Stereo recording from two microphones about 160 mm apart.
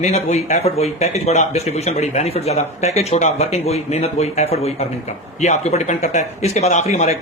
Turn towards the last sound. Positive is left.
turn(degrees=45)  # may be behind; listen again after turning